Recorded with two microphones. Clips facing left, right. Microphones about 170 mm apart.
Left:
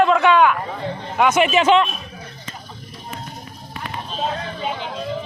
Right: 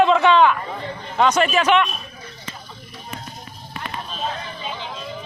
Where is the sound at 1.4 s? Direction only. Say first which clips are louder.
Left 5 dB; 20° left (ahead or behind).